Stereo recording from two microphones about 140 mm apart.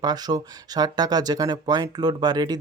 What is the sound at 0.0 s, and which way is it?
Speech, 30° right (ahead or behind).